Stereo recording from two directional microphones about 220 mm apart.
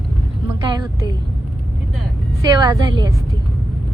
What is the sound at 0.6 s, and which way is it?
Speech, 20° right (ahead or behind).